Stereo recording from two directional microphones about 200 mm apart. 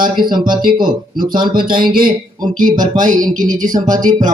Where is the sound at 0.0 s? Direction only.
45° right (ahead or behind).